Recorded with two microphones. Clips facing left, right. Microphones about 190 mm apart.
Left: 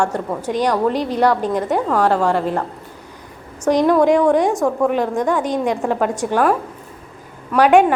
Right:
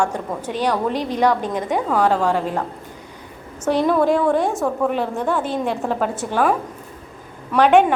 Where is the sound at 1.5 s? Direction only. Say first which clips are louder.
Left 2 dB; 10° right (ahead or behind).